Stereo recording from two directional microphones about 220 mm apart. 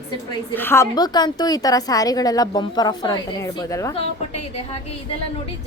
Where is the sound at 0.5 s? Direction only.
10° left (ahead or behind).